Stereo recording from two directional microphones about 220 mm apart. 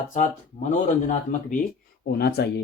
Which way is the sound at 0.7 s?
35° left (ahead or behind).